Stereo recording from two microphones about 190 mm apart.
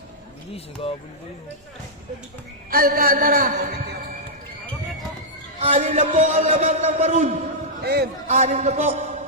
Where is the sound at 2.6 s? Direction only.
50° right (ahead or behind).